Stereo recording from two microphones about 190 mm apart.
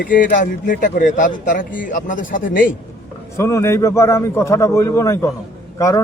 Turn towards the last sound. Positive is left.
turn(degrees=20)  # may be behind; listen again after turning